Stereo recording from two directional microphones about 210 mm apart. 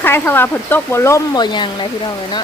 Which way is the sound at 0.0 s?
10° left (ahead or behind).